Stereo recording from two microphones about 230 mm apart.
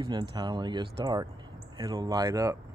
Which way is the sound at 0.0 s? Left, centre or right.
Centre.